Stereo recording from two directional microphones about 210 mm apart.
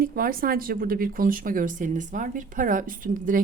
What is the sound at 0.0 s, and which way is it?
Speech, 45° right (ahead or behind).